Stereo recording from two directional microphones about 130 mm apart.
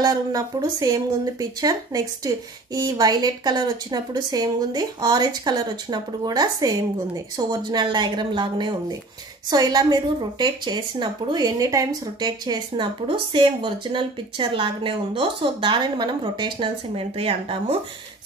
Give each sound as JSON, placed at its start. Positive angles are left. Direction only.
{"t": 0.0, "sound": "a woman's voice", "side_deg": -30}